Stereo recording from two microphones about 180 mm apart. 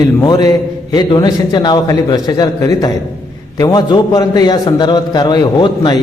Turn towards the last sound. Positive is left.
turn(degrees=25)  # may be behind; listen again after turning